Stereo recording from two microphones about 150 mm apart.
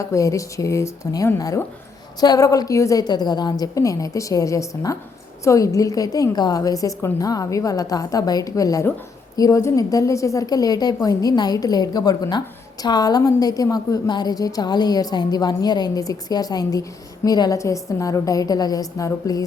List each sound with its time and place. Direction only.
0.0 s a woman's voice: 20° left (ahead or behind)